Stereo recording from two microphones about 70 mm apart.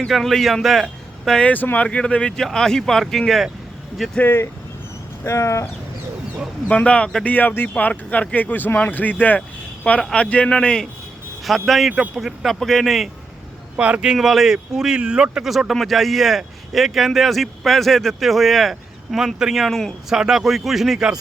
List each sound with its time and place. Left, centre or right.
0.1 s a man's voice: centre
1.4 s speech: left; by 3.4 s centre
4.2 s speech: left
5.2 s a sound: left
6.7 s speech: centre
10.0 s speech: centre
11.4 s speech: centre
13.7 s speech: centre
15.4 s speech: centre